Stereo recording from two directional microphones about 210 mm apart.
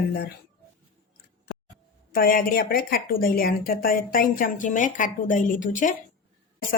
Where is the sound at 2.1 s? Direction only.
45° left (ahead or behind).